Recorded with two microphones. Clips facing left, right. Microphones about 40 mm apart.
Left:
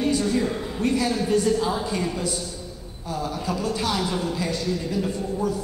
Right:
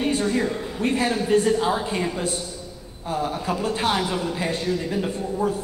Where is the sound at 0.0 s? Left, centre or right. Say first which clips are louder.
Even; right.